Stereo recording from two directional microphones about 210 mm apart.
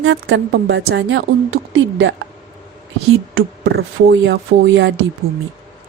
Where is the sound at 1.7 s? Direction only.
60° right (ahead or behind).